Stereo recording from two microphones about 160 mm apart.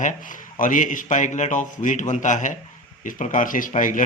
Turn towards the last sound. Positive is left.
turn(degrees=55)  # may be behind; listen again after turning